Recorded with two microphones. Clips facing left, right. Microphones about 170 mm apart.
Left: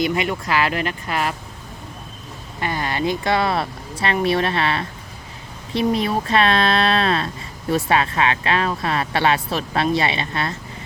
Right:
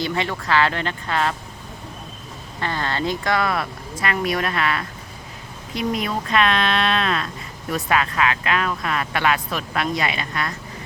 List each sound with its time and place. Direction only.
0.1 s speech: 15° left (ahead or behind)
2.6 s a woman's voice: 15° left (ahead or behind)